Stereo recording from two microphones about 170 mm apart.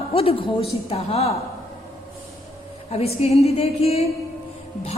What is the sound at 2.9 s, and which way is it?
A woman's voice, 35° left (ahead or behind).